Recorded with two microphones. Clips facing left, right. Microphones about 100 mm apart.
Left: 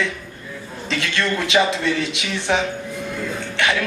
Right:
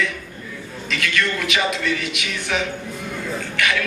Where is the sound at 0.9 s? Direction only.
30° left (ahead or behind).